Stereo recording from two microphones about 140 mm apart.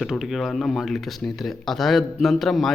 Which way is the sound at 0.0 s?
Centre (ahead or behind).